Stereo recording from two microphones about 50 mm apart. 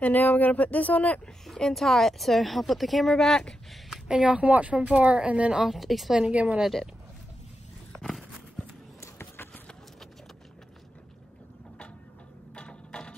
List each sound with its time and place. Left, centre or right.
0.0 s speech: left
1.4 s speech: centre
4.1 s speech: right
5.5 s speech: centre
6.1 s speech: centre
8.0 s a sound: centre
12.5 s mechanisms: centre